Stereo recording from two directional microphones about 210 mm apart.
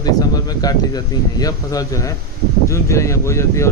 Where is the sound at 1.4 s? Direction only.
15° left (ahead or behind).